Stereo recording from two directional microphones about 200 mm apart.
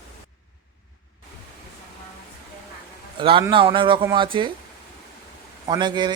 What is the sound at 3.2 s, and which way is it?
A man's voice, 25° right (ahead or behind).